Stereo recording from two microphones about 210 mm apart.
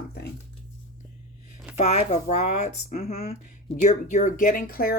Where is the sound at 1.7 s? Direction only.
30° left (ahead or behind).